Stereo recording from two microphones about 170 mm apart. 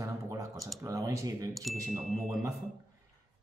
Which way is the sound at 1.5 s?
Centre (ahead or behind).